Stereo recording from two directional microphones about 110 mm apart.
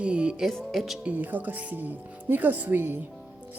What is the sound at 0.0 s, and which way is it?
Music, 10° right (ahead or behind).